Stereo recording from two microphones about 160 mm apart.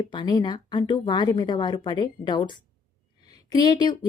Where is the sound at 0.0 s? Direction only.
30° left (ahead or behind).